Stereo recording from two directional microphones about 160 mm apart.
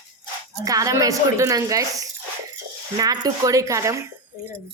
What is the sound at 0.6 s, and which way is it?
A woman's voice, 20° right (ahead or behind).